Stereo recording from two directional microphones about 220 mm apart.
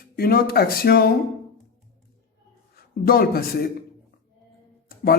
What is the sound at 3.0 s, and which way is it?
Speech, 40° left (ahead or behind).